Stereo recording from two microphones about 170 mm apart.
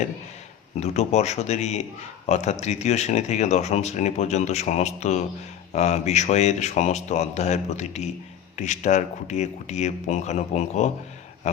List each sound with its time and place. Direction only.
0.8 s a man's voice: 40° left (ahead or behind)